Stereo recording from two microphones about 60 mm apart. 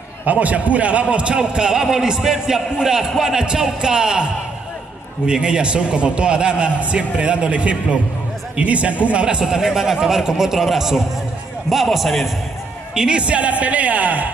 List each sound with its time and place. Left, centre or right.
0.2 s a man's voice: right; by 12.3 s centre
12.9 s a woman's voice: centre